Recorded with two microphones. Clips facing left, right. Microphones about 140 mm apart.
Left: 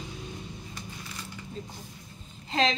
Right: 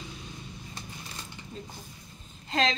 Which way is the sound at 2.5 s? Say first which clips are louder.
Left 1 dB; 5° left (ahead or behind).